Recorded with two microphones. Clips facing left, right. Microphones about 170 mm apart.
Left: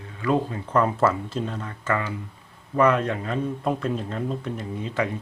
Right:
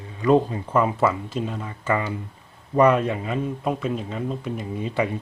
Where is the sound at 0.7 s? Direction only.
10° right (ahead or behind).